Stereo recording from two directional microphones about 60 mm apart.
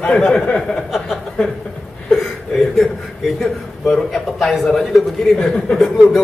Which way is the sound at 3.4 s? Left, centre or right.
Centre.